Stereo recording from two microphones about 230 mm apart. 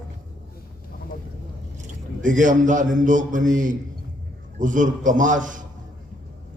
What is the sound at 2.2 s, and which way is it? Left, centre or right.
A man's voice, right.